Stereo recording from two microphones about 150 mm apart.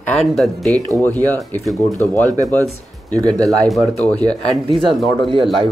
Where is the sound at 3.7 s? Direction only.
Centre (ahead or behind).